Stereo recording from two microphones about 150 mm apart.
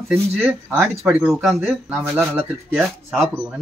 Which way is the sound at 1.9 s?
15° right (ahead or behind).